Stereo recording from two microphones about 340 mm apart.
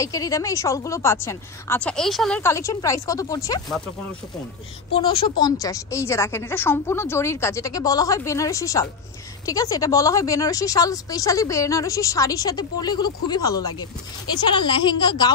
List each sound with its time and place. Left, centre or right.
0.0 s speech: centre
4.9 s speech: centre